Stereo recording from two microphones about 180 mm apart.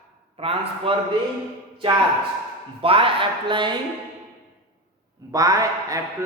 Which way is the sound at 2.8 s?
30° right (ahead or behind).